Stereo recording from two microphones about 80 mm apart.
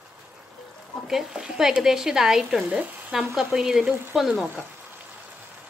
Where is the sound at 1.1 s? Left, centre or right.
Centre.